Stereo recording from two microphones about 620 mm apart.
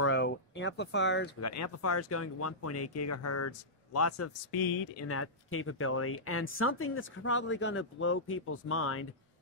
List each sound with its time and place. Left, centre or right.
0.0 s speech: centre
4.5 s speech: left
5.0 s speech: left